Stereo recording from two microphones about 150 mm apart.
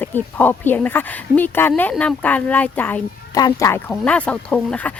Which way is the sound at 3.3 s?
25° left (ahead or behind).